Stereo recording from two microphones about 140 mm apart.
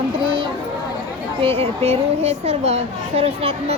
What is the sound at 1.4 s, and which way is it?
Speech, 45° right (ahead or behind).